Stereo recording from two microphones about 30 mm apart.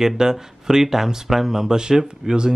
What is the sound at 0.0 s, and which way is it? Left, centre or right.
Speech, centre.